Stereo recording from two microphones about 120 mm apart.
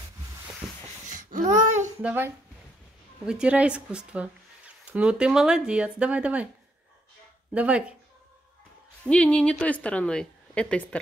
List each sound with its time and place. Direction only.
1.0 s a sound: 90° right
2.0 s speech: 15° right (ahead or behind)
7.5 s speech: 10° right (ahead or behind)
9.0 s a woman's voice: 10° left (ahead or behind)